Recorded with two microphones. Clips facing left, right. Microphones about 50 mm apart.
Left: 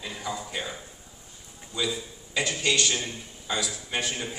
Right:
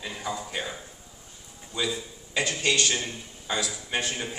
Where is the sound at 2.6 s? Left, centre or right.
Right.